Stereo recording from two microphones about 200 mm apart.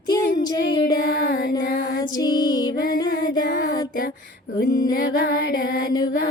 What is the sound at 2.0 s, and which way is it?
Music, 20° left (ahead or behind).